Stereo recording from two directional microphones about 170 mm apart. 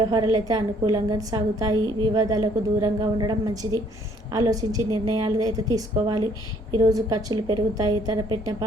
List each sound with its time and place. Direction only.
0.1 s a woman's voice: 25° right (ahead or behind)